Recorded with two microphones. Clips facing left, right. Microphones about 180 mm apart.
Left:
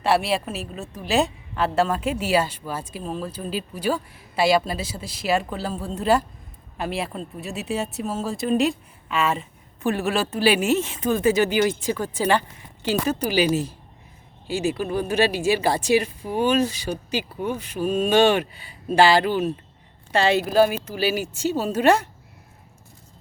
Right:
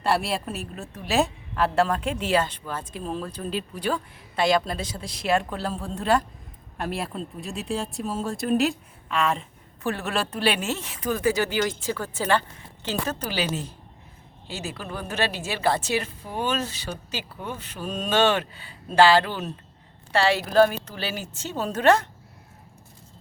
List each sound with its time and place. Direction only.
0.0 s a woman's voice: 5° left (ahead or behind)